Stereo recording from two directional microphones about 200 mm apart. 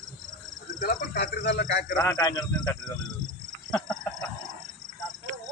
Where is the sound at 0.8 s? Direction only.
45° left (ahead or behind).